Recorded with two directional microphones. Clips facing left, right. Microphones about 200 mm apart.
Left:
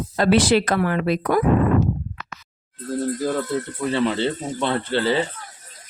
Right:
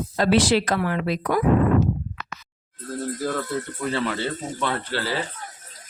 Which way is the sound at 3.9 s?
20° left (ahead or behind).